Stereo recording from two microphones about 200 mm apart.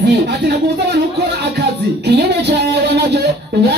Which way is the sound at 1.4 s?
60° right (ahead or behind).